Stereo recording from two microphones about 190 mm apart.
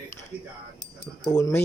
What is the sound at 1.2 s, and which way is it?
Speech, 20° left (ahead or behind).